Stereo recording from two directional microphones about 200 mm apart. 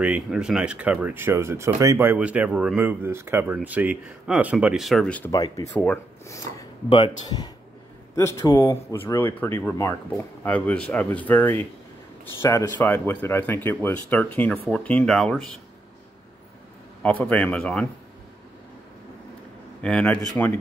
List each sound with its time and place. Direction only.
0.0 s speech: 5° right (ahead or behind)
5.3 s speech: 20° left (ahead or behind); by 15.4 s centre (ahead or behind)
17.0 s speech: 5° left (ahead or behind)
19.8 s speech: 5° left (ahead or behind)